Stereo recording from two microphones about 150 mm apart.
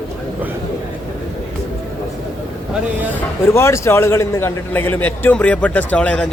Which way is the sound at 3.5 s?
20° left (ahead or behind).